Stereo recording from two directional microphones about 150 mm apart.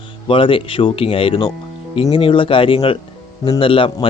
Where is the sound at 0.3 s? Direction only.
35° left (ahead or behind).